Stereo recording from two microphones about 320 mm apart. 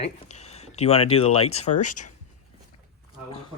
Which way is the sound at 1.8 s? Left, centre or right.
Left.